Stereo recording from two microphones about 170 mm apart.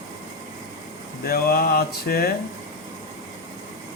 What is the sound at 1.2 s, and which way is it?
Speech, 65° left (ahead or behind).